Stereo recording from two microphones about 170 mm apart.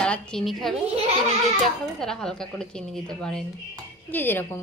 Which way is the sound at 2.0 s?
5° left (ahead or behind).